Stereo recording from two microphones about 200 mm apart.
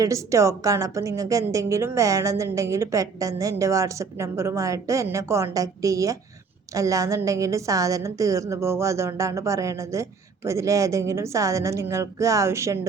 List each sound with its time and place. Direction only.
0.0 s a woman's voice: 15° right (ahead or behind)